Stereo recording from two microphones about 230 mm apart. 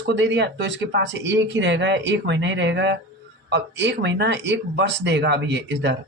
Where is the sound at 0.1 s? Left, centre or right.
Right.